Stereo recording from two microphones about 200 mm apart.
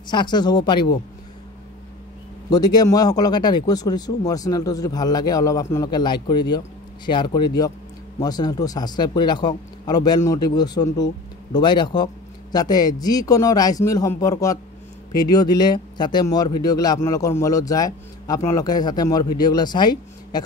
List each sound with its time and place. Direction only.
0.1 s speech: 20° left (ahead or behind)
2.5 s speech: 20° left (ahead or behind)